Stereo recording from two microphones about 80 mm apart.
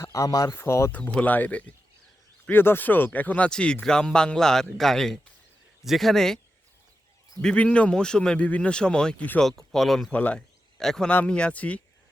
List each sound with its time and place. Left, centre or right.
0.0 s speech: left
0.6 s speech: left
0.9 s speech: centre
7.4 s speech: centre
10.1 s speech: centre
10.8 s a man's voice: centre
11.1 s speech: centre